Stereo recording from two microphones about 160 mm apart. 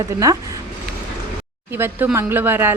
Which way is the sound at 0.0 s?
20° right (ahead or behind).